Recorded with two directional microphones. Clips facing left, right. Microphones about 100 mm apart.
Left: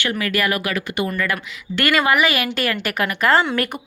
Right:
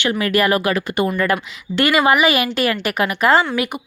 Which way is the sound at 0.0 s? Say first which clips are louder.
Right 4 dB; 25° right (ahead or behind).